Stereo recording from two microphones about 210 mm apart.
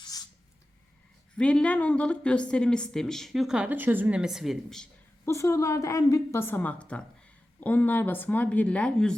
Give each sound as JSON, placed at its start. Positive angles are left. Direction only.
{"t": 0.0, "sound": "writing", "side_deg": 20}
{"t": 1.4, "sound": "a woman's voice", "side_deg": 5}
{"t": 5.3, "sound": "a woman's voice", "side_deg": 15}